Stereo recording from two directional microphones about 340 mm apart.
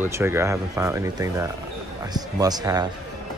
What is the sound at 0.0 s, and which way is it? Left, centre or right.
Speech, centre.